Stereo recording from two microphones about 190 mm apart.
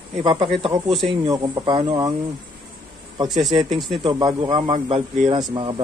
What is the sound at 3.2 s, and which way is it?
Speech, centre (ahead or behind).